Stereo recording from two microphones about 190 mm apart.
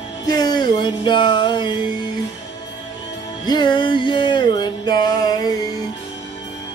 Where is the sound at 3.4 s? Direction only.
20° left (ahead or behind).